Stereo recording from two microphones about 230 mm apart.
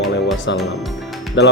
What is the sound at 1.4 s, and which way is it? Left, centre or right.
Speech, left.